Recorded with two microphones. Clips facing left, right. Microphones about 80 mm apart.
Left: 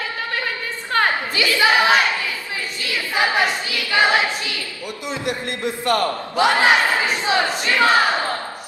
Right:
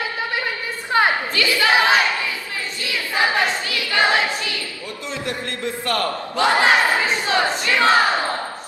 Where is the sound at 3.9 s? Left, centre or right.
Centre.